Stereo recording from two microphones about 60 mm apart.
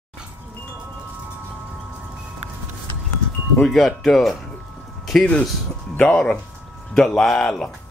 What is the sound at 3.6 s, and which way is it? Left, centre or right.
Speech, centre.